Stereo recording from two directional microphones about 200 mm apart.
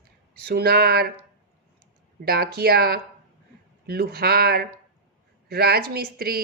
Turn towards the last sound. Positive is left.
turn(degrees=-50)  # may be behind; listen again after turning